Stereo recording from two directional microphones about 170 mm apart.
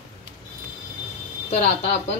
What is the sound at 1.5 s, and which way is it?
Speech, 40° left (ahead or behind).